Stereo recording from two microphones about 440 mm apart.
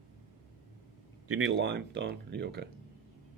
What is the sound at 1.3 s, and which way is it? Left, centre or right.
Speech, right.